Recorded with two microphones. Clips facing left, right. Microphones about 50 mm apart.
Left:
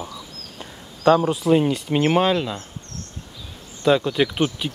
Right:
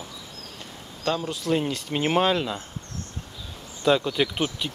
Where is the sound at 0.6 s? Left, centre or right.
Left.